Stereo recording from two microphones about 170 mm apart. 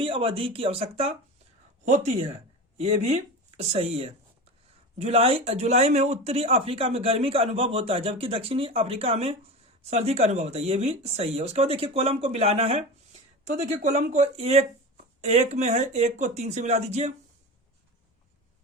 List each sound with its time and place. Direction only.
0.0 s speech: 35° right (ahead or behind)